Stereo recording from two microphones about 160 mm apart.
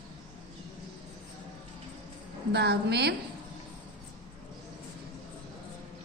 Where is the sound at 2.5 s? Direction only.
90° right.